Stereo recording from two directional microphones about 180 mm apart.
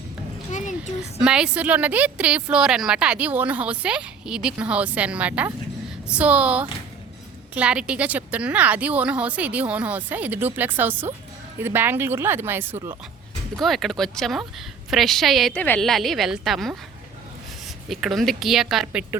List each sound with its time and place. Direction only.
0.5 s a sound: 45° left (ahead or behind)
1.2 s a woman's voice: 5° right (ahead or behind)
13.6 s a woman's voice: centre (ahead or behind)
17.8 s a woman's voice: centre (ahead or behind)